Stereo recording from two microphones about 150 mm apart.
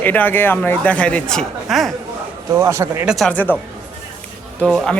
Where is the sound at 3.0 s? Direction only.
5° right (ahead or behind).